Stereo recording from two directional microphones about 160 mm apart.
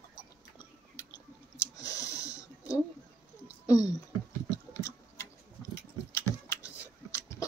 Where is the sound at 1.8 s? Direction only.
20° left (ahead or behind).